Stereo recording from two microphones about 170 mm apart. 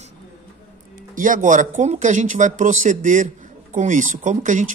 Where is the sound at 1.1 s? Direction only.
50° right (ahead or behind).